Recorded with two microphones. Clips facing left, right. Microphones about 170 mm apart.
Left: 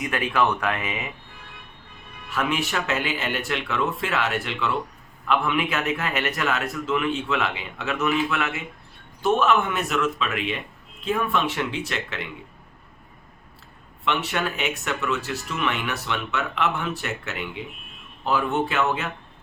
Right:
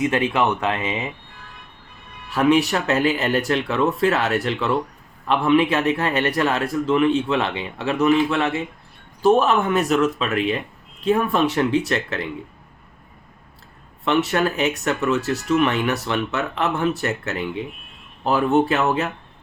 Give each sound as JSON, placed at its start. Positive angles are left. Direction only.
{"t": 0.0, "sound": "speech", "side_deg": -25}
{"t": 2.3, "sound": "speech", "side_deg": -35}
{"t": 14.0, "sound": "speech", "side_deg": -40}